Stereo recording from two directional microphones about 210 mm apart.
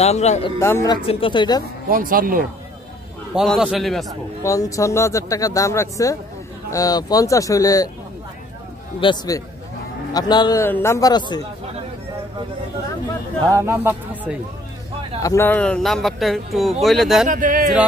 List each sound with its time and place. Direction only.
0.0 s speech: 30° left (ahead or behind)
0.6 s speech: 15° left (ahead or behind)
1.0 s speech: 25° left (ahead or behind)
1.9 s speech: 40° right (ahead or behind)
3.3 s speech: centre (ahead or behind)
4.4 s speech: 15° left (ahead or behind)
9.0 s speech: 20° left (ahead or behind)
13.5 s speech: 10° right (ahead or behind)
15.2 s speech: 10° left (ahead or behind)
17.3 s a man's voice: 40° right (ahead or behind)